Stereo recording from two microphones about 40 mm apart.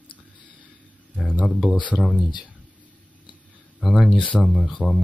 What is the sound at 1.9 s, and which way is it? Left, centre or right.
Speech, right.